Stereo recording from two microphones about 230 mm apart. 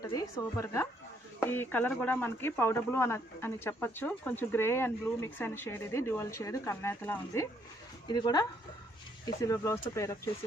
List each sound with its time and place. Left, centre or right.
0.0 s a woman's voice: centre